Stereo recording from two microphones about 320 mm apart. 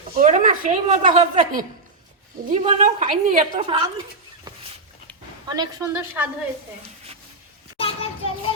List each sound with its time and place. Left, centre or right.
0.2 s a woman's voice: right
5.5 s a woman's voice: centre
7.8 s child singing: centre